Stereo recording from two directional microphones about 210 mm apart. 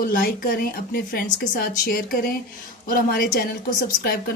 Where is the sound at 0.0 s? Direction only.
45° left (ahead or behind).